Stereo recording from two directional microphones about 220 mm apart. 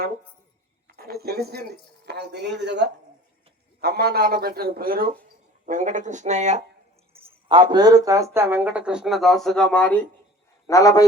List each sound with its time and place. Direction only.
0.9 s a man's voice: 45° right (ahead or behind); by 11.0 s 15° left (ahead or behind)